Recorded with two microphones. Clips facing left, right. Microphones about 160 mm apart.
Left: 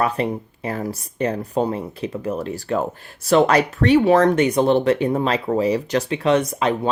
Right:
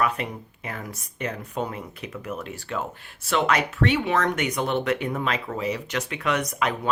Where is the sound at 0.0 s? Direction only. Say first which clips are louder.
Left 5 dB; 35° left (ahead or behind).